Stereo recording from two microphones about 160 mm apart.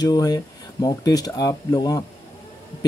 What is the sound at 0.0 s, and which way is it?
Speech, 25° left (ahead or behind).